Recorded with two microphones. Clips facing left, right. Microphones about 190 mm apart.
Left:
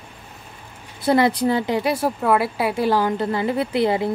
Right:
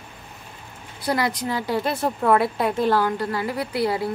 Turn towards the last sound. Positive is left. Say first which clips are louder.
# left 4 dB
turn(degrees=20)  # may be behind; listen again after turning